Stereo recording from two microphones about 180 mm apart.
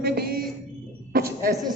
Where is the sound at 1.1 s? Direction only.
55° right (ahead or behind).